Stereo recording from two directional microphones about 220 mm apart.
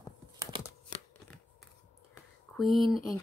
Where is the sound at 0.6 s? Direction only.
5° left (ahead or behind).